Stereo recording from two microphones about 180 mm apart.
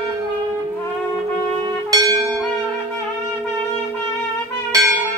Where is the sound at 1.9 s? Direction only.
20° right (ahead or behind).